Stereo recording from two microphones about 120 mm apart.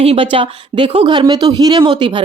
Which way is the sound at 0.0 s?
50° right (ahead or behind).